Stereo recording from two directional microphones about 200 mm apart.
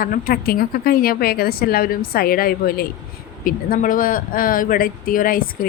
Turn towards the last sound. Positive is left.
turn(degrees=45)  # may be behind; listen again after turning